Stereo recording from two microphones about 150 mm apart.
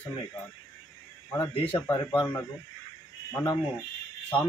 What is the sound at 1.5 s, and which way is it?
Speech, 35° left (ahead or behind).